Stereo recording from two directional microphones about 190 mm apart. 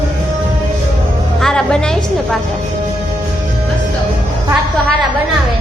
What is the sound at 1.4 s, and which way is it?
Speech, 5° left (ahead or behind).